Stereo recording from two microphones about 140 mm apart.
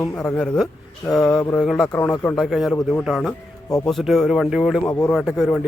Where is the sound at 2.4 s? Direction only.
Centre (ahead or behind).